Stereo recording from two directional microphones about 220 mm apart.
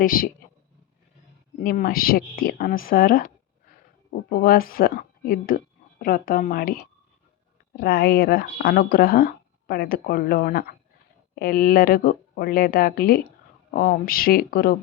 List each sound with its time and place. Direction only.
0.0 s speech: 40° left (ahead or behind)
1.6 s speech: 40° left (ahead or behind)
7.8 s speech: 45° left (ahead or behind)